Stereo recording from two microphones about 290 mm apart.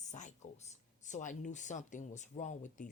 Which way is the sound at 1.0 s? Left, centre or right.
Left.